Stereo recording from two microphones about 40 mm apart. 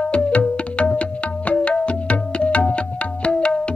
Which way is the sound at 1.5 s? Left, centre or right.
Left.